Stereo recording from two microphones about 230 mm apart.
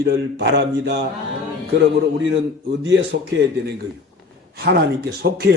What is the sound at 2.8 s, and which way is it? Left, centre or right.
Speech, right.